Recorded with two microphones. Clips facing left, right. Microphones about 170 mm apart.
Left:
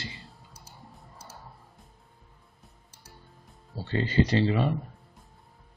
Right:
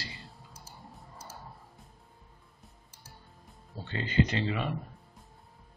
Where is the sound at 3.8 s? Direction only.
35° left (ahead or behind).